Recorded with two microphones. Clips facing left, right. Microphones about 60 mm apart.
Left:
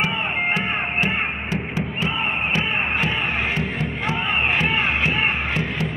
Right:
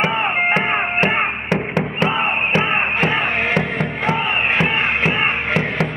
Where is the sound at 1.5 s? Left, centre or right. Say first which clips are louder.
Right 6 dB; right.